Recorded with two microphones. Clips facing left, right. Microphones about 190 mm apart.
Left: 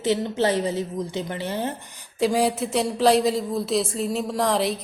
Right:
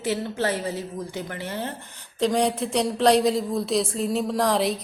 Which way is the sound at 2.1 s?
5° left (ahead or behind).